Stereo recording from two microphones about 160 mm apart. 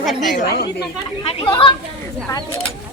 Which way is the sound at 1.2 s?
35° left (ahead or behind).